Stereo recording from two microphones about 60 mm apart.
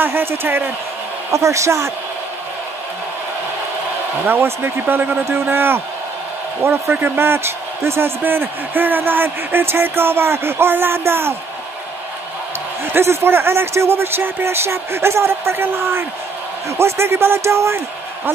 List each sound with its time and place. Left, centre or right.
0.0 s a man's voice: right
1.3 s a woman's voice: right
4.3 s a man's voice: right
12.8 s a man's voice: right